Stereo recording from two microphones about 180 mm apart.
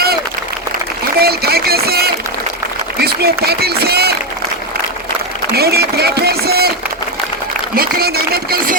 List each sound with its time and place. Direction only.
1.2 s speech: 60° right (ahead or behind)
5.5 s speech: 60° right (ahead or behind)
7.8 s speech: 60° right (ahead or behind)